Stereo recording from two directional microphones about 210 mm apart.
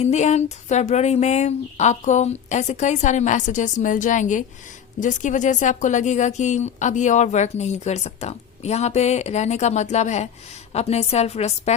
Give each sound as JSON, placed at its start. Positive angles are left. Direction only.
{"t": 0.0, "sound": "speech", "side_deg": 35}